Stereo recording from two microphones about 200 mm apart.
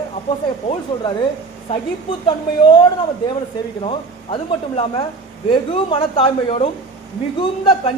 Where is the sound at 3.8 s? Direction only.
25° left (ahead or behind).